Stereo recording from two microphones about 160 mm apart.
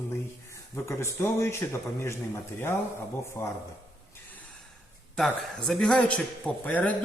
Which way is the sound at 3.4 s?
15° left (ahead or behind).